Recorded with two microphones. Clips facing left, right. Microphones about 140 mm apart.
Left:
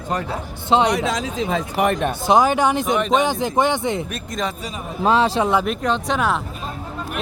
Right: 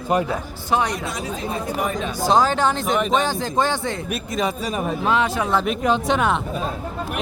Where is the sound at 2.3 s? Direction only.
15° left (ahead or behind).